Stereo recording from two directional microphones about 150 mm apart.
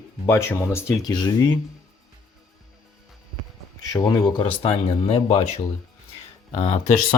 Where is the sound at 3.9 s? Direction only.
25° left (ahead or behind).